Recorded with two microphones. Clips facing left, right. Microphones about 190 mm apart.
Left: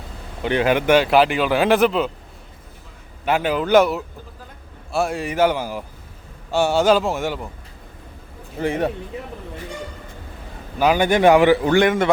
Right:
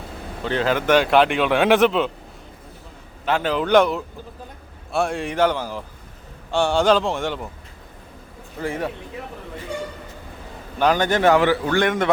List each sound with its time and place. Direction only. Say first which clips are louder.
0.4 s speech: left 3 dB; 15° left (ahead or behind)
3.2 s speech: left 1 dB; 10° left (ahead or behind)
8.6 s a man's voice: left 5 dB; 20° left (ahead or behind)
10.8 s a man's voice: left 2 dB; 10° left (ahead or behind)